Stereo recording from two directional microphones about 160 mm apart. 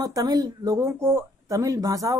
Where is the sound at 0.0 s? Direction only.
20° right (ahead or behind).